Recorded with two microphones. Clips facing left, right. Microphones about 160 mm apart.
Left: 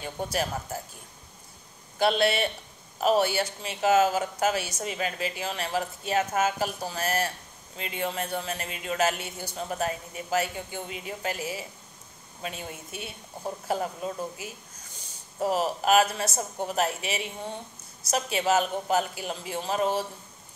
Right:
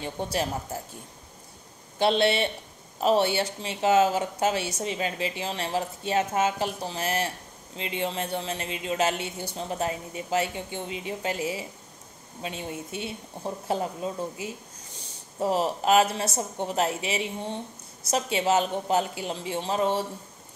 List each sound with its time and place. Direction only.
0.0 s a woman's voice: 25° right (ahead or behind)
2.0 s a woman's voice: 30° right (ahead or behind)